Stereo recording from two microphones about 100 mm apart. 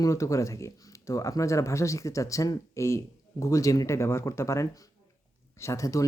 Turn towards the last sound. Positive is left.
turn(degrees=30)  # may be behind; listen again after turning